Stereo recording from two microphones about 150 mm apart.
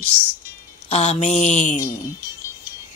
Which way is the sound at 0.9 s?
45° left (ahead or behind).